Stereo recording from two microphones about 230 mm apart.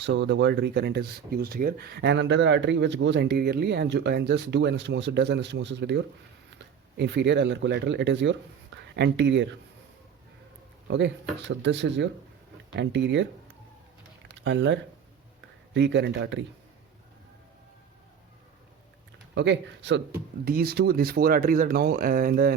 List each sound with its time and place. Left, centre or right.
0.0 s speech: right
10.8 s speech: right
14.3 s speech: right
19.3 s speech: right